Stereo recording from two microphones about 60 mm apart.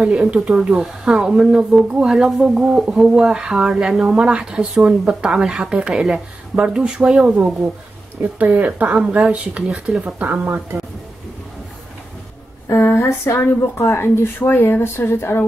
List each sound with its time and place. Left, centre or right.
0.0 s speech: centre
8.2 s speech: right
10.1 s speech: right
13.0 s a woman's voice: left